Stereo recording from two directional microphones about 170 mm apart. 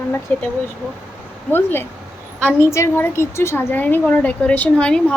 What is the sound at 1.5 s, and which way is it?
A woman's voice, 10° left (ahead or behind).